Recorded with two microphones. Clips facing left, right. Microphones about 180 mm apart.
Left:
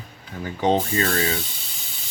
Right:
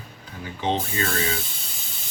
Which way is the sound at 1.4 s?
Centre (ahead or behind).